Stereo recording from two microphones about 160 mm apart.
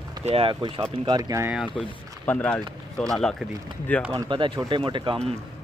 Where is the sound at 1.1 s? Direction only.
25° right (ahead or behind).